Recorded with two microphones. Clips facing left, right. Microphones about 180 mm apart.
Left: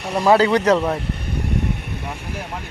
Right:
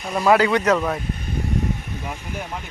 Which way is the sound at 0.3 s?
30° left (ahead or behind).